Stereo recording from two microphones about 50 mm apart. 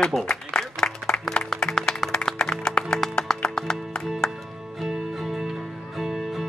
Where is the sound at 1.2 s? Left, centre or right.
Centre.